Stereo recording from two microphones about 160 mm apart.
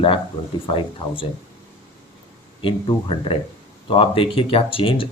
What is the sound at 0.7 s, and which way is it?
Speech, 30° left (ahead or behind).